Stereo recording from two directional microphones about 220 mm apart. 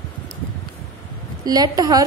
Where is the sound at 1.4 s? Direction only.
15° right (ahead or behind).